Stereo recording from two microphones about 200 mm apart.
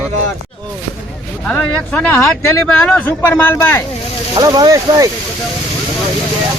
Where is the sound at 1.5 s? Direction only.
5° left (ahead or behind).